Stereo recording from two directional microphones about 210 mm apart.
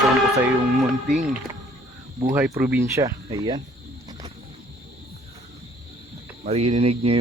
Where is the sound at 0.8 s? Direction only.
Centre (ahead or behind); by 3.6 s 20° right (ahead or behind).